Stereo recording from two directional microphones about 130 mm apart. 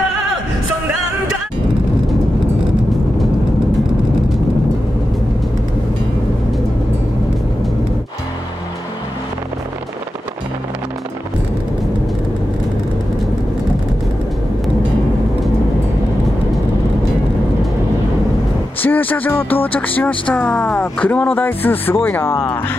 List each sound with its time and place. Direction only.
18.8 s speech: 15° left (ahead or behind)